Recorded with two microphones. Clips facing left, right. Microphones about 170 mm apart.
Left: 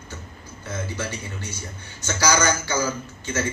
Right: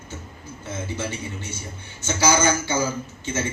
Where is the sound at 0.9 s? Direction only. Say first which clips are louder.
Right 1 dB; 25° right (ahead or behind).